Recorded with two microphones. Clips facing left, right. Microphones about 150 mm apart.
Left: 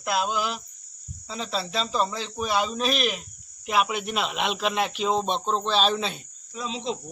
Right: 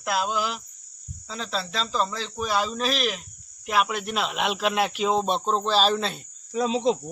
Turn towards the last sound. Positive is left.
turn(degrees=-50)  # may be behind; listen again after turning